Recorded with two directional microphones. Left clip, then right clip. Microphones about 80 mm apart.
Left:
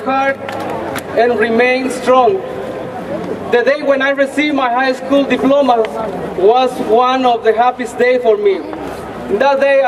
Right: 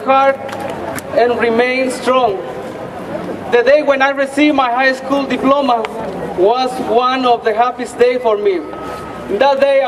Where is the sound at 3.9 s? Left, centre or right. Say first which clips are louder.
Even; right.